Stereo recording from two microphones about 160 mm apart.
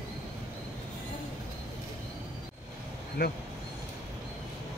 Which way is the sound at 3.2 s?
75° left (ahead or behind).